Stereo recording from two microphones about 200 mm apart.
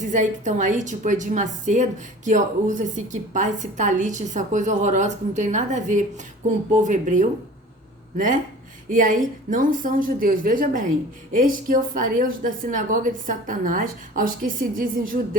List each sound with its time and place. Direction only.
0.0 s a woman's voice: 40° right (ahead or behind)